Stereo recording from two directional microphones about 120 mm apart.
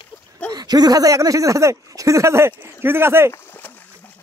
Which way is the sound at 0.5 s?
35° right (ahead or behind).